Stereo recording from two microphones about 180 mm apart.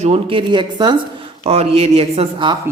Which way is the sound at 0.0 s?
30° right (ahead or behind).